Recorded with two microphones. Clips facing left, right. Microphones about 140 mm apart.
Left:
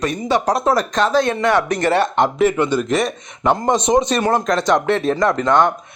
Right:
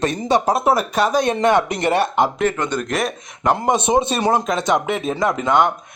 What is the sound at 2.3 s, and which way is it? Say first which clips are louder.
Speech: left 4 dB; 10° left (ahead or behind).